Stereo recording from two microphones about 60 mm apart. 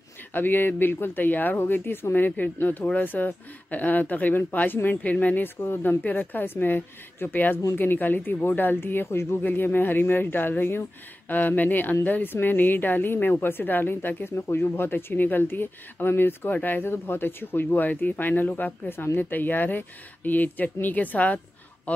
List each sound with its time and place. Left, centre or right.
0.3 s speech: left
9.4 s speech: left